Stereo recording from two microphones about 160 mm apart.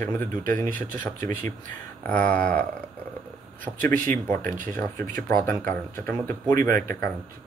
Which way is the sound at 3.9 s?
55° right (ahead or behind).